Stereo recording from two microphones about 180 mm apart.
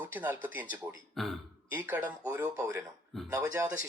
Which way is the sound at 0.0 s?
10° right (ahead or behind).